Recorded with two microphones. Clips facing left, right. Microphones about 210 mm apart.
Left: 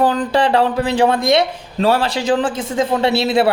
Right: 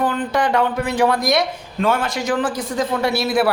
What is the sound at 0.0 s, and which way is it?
Speech, 30° left (ahead or behind).